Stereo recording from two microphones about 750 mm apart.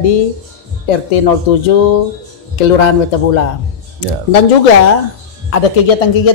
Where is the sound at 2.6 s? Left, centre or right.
Left.